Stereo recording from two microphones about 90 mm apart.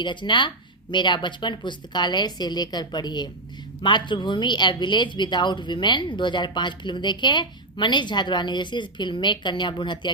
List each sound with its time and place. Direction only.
0.0 s speech: 60° left (ahead or behind)